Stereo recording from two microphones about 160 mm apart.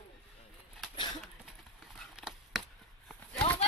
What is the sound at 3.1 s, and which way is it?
Clip-clop, 5° left (ahead or behind).